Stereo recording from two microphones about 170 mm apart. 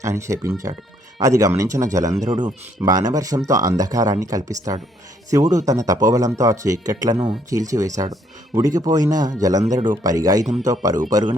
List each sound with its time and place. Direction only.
0.0 s speech: 15° right (ahead or behind)